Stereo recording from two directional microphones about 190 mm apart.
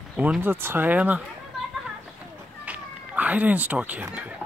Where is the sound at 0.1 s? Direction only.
5° right (ahead or behind).